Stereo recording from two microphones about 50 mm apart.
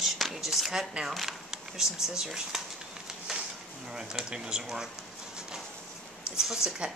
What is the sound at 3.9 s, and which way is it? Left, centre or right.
Speech, centre.